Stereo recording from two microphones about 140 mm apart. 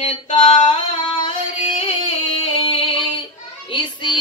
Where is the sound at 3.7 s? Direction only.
35° left (ahead or behind).